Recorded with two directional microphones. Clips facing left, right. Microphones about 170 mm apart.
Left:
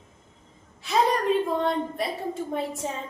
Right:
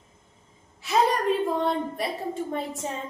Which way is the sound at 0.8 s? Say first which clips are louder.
Right 1 dB; centre (ahead or behind).